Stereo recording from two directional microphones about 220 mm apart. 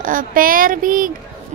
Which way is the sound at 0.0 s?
40° right (ahead or behind).